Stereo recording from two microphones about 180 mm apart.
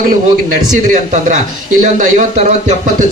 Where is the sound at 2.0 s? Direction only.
40° right (ahead or behind).